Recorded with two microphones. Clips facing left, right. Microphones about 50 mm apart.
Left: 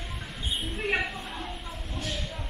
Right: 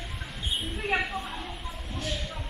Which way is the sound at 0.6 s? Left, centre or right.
Centre.